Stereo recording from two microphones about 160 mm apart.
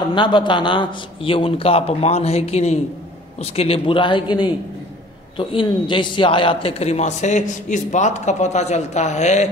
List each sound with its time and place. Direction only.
0.1 s a man's voice: 30° left (ahead or behind); by 9.5 s 45° left (ahead or behind)